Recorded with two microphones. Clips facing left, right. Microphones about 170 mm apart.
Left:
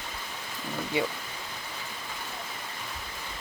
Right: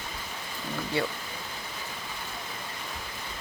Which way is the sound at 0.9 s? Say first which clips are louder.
Left 1 dB; 15° left (ahead or behind).